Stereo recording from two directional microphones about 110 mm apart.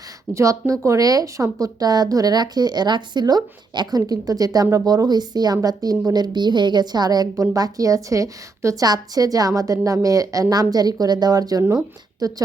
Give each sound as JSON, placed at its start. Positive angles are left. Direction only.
{"t": 0.3, "sound": "speech", "side_deg": -30}